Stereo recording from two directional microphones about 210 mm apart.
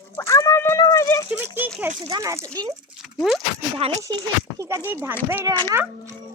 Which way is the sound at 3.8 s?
30° right (ahead or behind).